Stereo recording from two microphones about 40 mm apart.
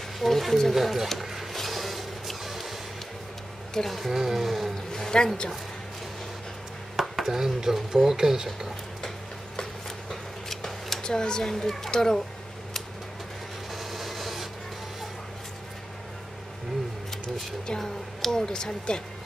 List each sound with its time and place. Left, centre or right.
0.2 s speech: centre
1.2 s music: centre
3.9 s speech: centre
4.9 s a sound: centre
7.0 s speech: centre
10.5 s a sound: centre
13.7 s printer: centre
17.6 s speech: centre